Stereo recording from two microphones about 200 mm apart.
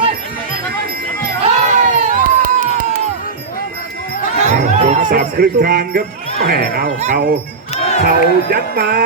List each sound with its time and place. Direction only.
1.4 s crowd: 40° right (ahead or behind)
4.4 s music: 35° right (ahead or behind)
5.1 s speech: 45° right (ahead or behind)
7.0 s speech: 40° right (ahead or behind)
7.8 s crowd: 30° left (ahead or behind)
8.0 s speech: 50° right (ahead or behind)